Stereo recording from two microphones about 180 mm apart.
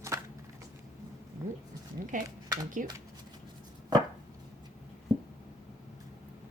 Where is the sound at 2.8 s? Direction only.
50° right (ahead or behind).